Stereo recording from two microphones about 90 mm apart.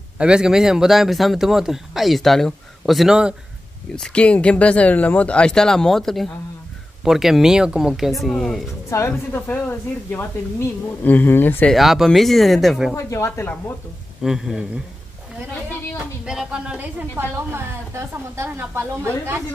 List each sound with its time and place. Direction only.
0.2 s speech: 10° right (ahead or behind)
3.9 s speech: 10° left (ahead or behind)
8.9 s speech: 35° left (ahead or behind)
9.3 s speech: 25° left (ahead or behind)
11.7 s speech: 5° right (ahead or behind)
12.9 s speech: 30° left (ahead or behind)
14.2 s speech: 5° right (ahead or behind)
16.3 s a woman's voice: 10° right (ahead or behind); by 19.4 s 25° right (ahead or behind)